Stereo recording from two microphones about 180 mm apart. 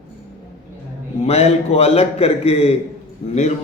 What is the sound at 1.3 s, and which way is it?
A man's voice, 35° left (ahead or behind).